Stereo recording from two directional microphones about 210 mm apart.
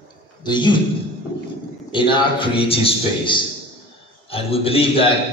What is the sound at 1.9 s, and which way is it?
A man's voice, 25° left (ahead or behind).